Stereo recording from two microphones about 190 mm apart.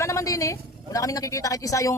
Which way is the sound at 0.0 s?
15° left (ahead or behind).